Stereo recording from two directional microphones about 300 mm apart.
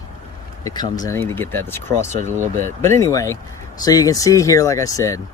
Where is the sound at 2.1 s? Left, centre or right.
Right.